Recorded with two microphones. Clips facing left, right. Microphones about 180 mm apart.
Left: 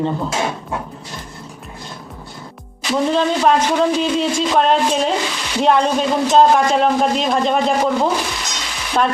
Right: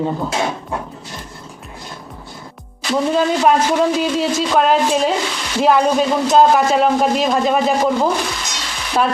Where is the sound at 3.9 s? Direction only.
5° right (ahead or behind).